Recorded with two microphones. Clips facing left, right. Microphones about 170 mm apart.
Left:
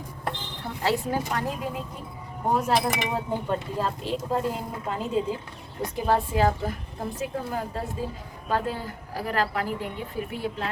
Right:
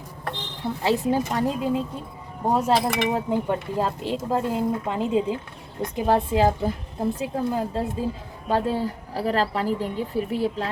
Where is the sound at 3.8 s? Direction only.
20° right (ahead or behind).